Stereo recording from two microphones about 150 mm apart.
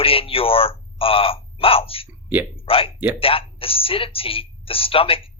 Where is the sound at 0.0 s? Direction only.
40° left (ahead or behind).